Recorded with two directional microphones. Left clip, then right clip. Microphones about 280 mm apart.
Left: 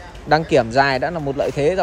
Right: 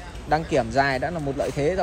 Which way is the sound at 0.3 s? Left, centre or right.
Left.